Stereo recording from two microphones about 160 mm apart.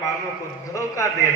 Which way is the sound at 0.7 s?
20° left (ahead or behind).